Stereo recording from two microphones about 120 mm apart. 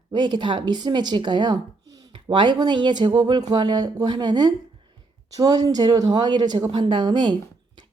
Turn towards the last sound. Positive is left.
turn(degrees=-40)  # may be behind; listen again after turning